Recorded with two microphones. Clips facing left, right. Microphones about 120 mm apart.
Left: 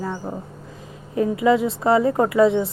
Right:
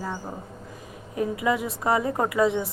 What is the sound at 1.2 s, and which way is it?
A woman's voice, 25° left (ahead or behind).